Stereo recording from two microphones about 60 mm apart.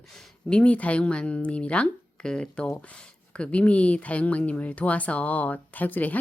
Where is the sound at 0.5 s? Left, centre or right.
Left.